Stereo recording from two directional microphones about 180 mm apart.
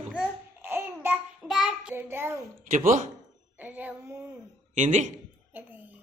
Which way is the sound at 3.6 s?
10° right (ahead or behind).